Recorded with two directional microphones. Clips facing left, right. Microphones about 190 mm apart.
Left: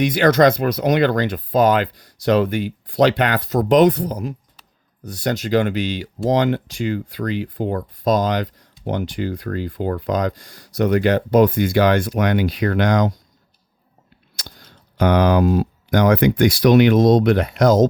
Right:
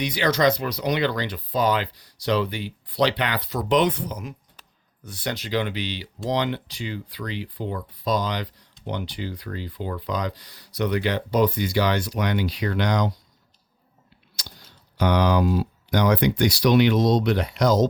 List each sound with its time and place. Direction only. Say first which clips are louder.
0.0 s speech: left 7 dB; 50° left (ahead or behind)
14.4 s a sound: left 4 dB; 50° left (ahead or behind)
14.9 s speech: left 5 dB; 50° left (ahead or behind)